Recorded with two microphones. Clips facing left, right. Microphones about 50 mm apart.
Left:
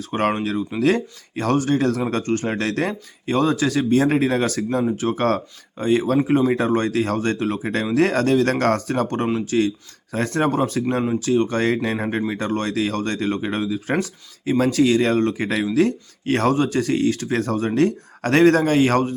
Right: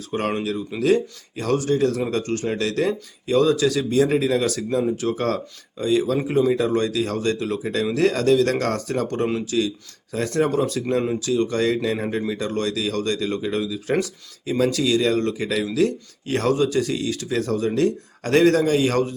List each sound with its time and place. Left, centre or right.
0.1 s speech: left
6.5 s speech: left